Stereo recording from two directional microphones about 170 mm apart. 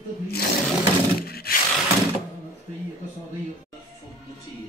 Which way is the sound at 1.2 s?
65° left (ahead or behind).